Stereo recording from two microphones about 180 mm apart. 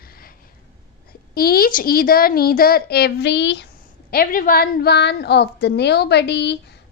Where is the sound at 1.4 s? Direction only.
55° left (ahead or behind); by 3.7 s 80° left.